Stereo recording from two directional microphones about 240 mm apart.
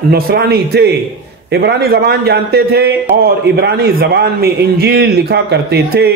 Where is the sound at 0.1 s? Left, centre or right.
Right.